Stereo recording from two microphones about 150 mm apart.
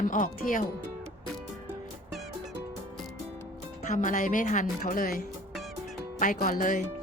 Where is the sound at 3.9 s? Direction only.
55° left (ahead or behind).